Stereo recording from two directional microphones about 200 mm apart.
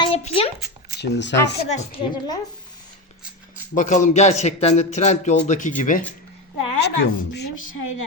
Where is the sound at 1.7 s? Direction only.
30° left (ahead or behind).